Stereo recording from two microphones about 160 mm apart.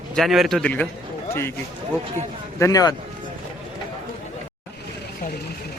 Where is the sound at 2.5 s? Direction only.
20° left (ahead or behind).